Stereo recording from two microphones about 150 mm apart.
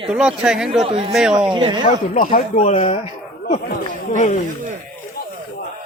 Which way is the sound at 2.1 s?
65° left (ahead or behind).